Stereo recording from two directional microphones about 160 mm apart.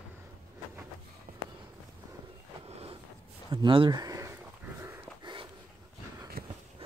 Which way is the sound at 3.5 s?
30° right (ahead or behind).